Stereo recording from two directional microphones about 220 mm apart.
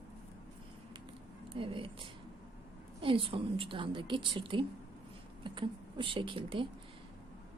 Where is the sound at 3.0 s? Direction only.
25° right (ahead or behind).